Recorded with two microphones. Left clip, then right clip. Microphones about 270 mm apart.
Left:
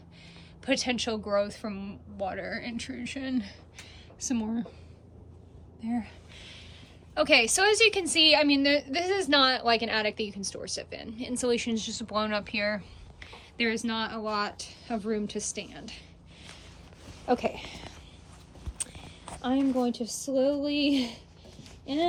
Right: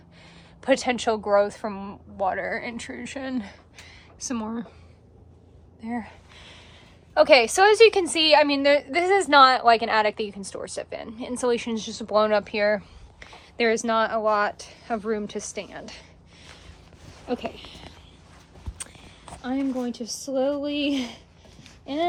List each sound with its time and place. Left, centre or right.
0.6 s a woman's voice: centre
5.8 s a sound: centre
7.1 s a woman's voice: centre
17.2 s speech: centre
19.5 s a woman's voice: centre
20.3 s a woman's voice: centre